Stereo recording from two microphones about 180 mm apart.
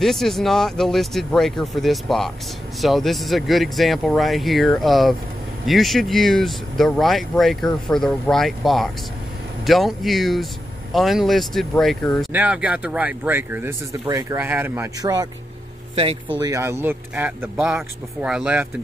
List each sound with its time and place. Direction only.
0.0 s speech: centre (ahead or behind)
12.3 s speech: 10° right (ahead or behind)
16.0 s speech: 35° right (ahead or behind)
16.3 s speech: 20° right (ahead or behind)